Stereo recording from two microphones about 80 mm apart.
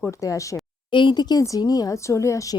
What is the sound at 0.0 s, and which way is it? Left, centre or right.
Speech, left.